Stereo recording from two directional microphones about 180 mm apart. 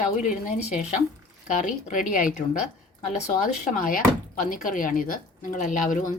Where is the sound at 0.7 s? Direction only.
40° left (ahead or behind).